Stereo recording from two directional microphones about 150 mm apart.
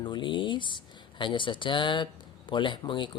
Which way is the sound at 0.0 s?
30° left (ahead or behind).